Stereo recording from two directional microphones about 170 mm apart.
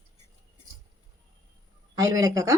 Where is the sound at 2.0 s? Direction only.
20° right (ahead or behind).